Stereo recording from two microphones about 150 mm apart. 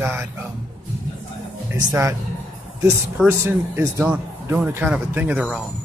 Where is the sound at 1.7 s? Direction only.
20° right (ahead or behind).